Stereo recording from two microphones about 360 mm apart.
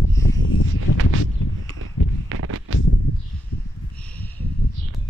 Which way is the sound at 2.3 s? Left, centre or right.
Right.